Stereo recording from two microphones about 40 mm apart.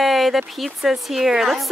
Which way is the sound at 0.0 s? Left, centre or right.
Centre.